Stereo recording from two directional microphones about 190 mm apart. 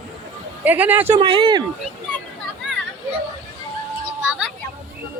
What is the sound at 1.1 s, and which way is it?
Speech, 30° right (ahead or behind).